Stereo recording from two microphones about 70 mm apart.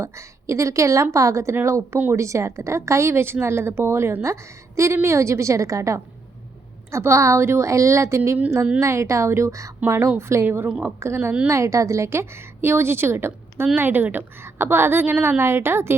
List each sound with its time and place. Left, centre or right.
0.0 s a woman's voice: right
10.7 s a woman's voice: centre
11.0 s a woman's voice: right